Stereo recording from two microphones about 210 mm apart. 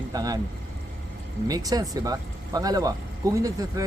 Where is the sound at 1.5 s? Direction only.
15° right (ahead or behind).